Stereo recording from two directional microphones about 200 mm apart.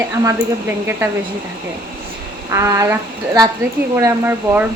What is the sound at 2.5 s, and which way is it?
Speech, 15° right (ahead or behind).